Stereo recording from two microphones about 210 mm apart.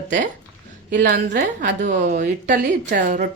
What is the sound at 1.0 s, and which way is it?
A woman's voice, 40° right (ahead or behind).